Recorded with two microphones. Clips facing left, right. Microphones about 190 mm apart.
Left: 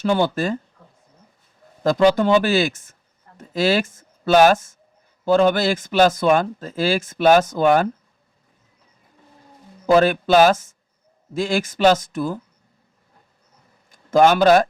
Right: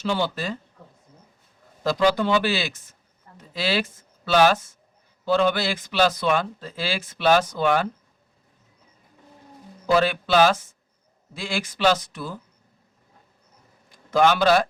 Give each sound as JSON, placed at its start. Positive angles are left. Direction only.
{"t": 0.0, "sound": "speech", "side_deg": 50}
{"t": 1.8, "sound": "speech", "side_deg": 50}
{"t": 9.8, "sound": "speech", "side_deg": 45}
{"t": 13.9, "sound": "a man's voice", "side_deg": 45}